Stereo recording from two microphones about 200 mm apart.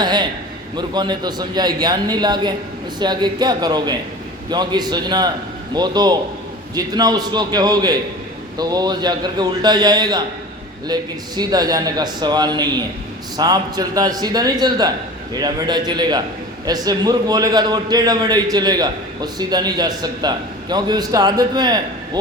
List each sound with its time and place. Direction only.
0.0 s a man's voice: 20° right (ahead or behind)